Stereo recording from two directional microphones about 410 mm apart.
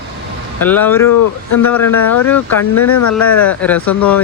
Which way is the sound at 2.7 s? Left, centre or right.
Left.